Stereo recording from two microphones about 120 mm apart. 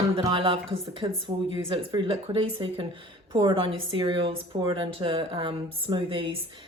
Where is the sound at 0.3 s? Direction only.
45° right (ahead or behind).